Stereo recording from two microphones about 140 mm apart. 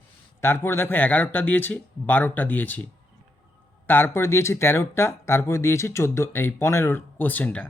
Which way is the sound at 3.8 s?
15° left (ahead or behind).